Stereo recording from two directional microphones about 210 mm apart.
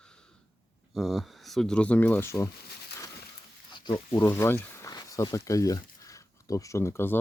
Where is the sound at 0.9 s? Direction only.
Centre (ahead or behind).